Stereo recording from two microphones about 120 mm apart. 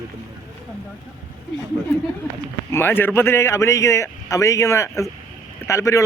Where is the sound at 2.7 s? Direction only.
20° left (ahead or behind).